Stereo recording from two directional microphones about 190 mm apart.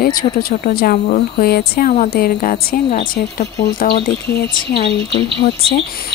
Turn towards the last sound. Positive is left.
turn(degrees=60)  # may be behind; listen again after turning